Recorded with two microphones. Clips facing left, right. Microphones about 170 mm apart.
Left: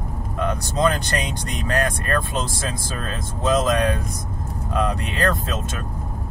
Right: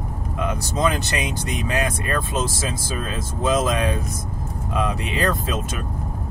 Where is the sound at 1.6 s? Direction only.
5° right (ahead or behind).